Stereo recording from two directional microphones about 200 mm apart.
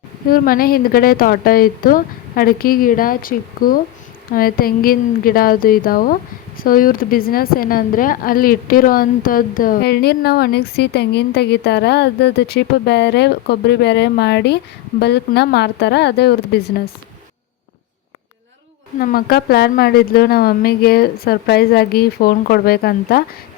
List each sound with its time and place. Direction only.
0.3 s a woman's voice: 45° left (ahead or behind)
18.9 s a woman's voice: 45° left (ahead or behind)